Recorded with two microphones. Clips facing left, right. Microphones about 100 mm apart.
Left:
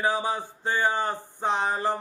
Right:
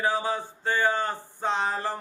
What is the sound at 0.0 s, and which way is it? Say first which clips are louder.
Mantra: even; 15° left (ahead or behind).